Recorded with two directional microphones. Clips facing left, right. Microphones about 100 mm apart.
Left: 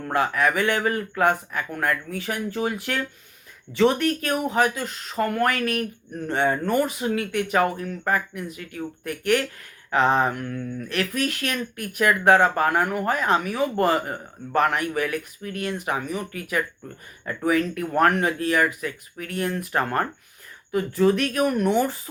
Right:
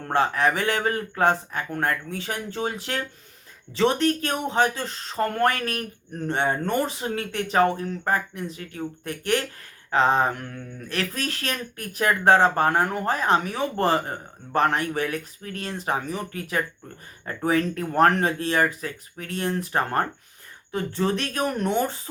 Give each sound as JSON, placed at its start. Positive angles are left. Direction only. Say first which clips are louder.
{"t": 0.0, "sound": "speech", "louder": "even", "side_deg": -30}